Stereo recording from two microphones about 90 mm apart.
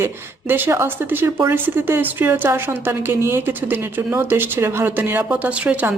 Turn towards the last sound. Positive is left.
turn(degrees=-15)  # may be behind; listen again after turning